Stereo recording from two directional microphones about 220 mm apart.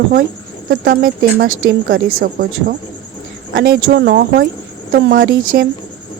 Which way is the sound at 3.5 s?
50° right (ahead or behind).